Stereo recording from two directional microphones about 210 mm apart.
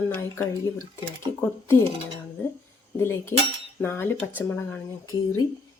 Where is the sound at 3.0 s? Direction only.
10° left (ahead or behind).